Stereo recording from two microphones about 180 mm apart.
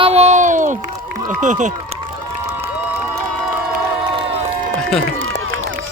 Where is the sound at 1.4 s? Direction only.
40° right (ahead or behind).